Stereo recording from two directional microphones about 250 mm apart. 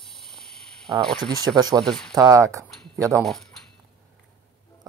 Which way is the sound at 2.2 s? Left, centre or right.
Centre.